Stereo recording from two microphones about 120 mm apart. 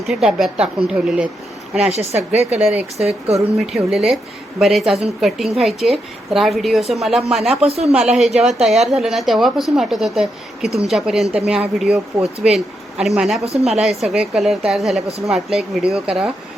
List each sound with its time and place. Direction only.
0.0 s a woman's voice: 5° right (ahead or behind)
1.9 s a woman's voice: 60° right (ahead or behind)
3.7 s a woman's voice: 5° right (ahead or behind)
7.6 s a woman's voice: 60° right (ahead or behind)
7.9 s a woman's voice: 5° right (ahead or behind)